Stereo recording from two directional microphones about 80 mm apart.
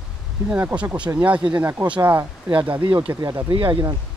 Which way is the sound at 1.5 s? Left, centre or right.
Right.